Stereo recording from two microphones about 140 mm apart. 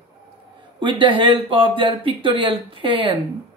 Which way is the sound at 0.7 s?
35° right (ahead or behind).